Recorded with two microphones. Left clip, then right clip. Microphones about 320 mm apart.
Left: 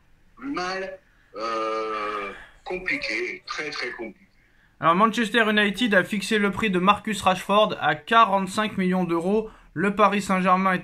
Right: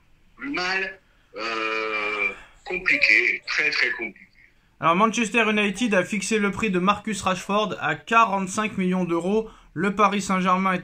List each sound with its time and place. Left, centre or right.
0.4 s a man's voice: centre